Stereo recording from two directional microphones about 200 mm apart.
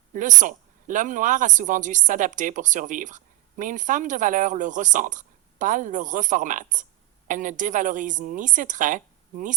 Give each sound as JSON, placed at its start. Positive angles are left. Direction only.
{"t": 0.1, "sound": "speech", "side_deg": -40}